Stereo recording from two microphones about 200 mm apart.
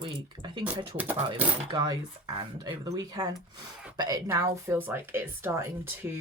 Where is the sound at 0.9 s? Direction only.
10° right (ahead or behind).